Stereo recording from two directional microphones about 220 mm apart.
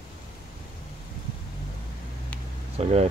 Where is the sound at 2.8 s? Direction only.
30° right (ahead or behind).